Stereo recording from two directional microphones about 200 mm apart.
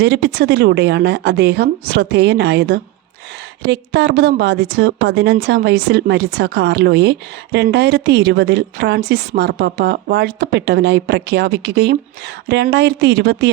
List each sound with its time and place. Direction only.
0.0 s speech: 55° right (ahead or behind)